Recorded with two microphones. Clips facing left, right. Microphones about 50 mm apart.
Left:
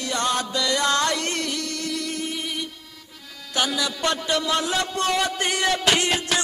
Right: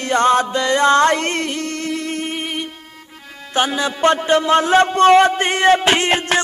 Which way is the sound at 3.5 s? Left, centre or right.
Right.